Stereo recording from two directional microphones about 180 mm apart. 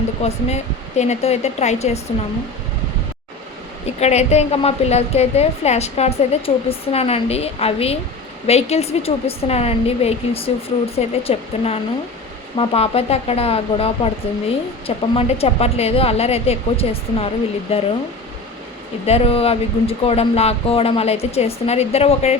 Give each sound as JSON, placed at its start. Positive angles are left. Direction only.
{"t": 0.2, "sound": "a woman's voice", "side_deg": 35}
{"t": 4.0, "sound": "a woman's voice", "side_deg": 35}
{"t": 19.0, "sound": "a woman's voice", "side_deg": 35}